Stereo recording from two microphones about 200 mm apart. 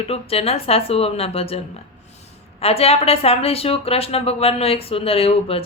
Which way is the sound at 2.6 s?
30° left (ahead or behind).